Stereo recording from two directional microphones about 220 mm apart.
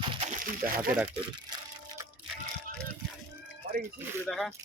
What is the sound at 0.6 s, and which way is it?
Speech, 10° right (ahead or behind).